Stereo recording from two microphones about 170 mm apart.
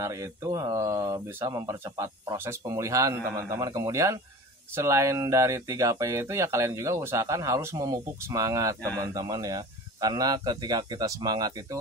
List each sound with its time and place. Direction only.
0.0 s speech: 15° right (ahead or behind)